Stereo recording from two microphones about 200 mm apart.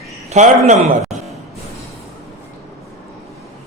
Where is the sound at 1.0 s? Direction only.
Centre (ahead or behind).